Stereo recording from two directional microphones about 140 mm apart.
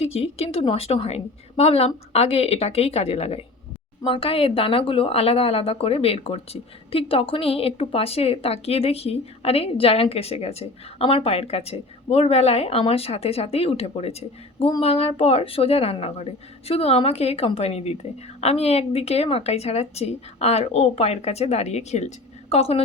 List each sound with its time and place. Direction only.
0.0 s a woman's voice: 45° left (ahead or behind)